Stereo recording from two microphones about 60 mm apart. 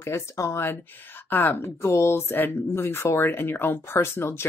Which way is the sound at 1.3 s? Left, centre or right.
Left.